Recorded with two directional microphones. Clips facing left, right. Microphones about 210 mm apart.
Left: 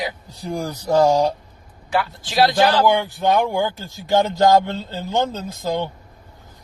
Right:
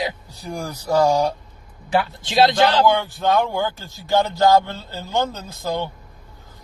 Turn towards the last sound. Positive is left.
turn(degrees=15)  # may be behind; listen again after turning